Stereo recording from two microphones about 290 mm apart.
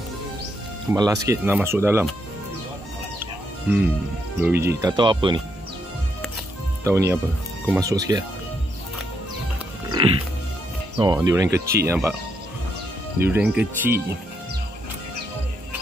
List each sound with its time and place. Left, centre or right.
0.9 s speech: centre
3.2 s chicken: centre
4.4 s speech: centre
6.8 s speech: centre
9.8 s music: centre
11.0 s speech: centre
13.2 s speech: centre